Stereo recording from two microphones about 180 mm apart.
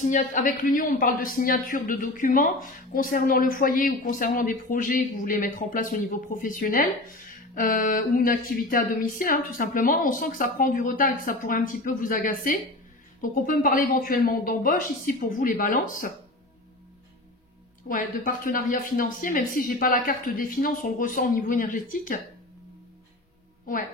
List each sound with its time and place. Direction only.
0.1 s speech: 45° left (ahead or behind)
17.8 s speech: 50° left (ahead or behind)